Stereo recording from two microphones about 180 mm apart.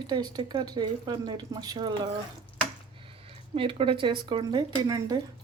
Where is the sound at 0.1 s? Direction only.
20° right (ahead or behind).